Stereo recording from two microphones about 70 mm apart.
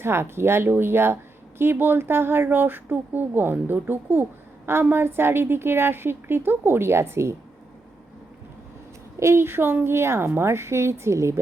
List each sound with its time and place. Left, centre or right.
0.0 s speech: right
9.1 s speech: right